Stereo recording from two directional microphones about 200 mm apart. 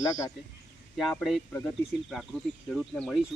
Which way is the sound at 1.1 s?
Centre (ahead or behind).